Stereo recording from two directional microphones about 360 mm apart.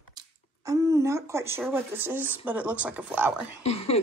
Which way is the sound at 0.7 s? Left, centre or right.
Centre.